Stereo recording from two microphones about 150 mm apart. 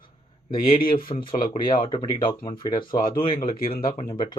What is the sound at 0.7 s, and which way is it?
Speech, 70° left (ahead or behind).